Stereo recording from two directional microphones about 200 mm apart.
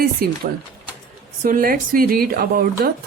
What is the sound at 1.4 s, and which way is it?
Speech, 45° right (ahead or behind).